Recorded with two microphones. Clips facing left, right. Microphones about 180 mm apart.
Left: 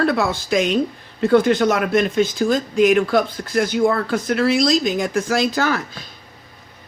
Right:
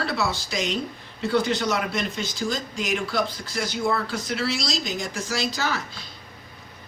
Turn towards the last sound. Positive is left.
turn(degrees=55)  # may be behind; listen again after turning